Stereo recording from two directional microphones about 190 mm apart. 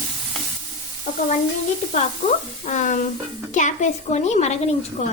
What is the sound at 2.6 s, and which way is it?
A woman's voice, 40° left (ahead or behind).